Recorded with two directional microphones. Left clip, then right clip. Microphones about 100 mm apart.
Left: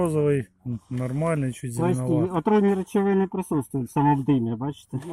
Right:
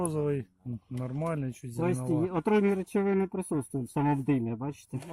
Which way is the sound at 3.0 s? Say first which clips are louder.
Left 5 dB; 25° right (ahead or behind).